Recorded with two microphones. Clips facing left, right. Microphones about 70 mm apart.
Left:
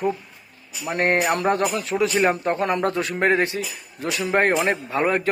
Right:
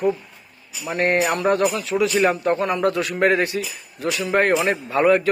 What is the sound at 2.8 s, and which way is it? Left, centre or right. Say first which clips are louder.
Speech: right 2 dB; left.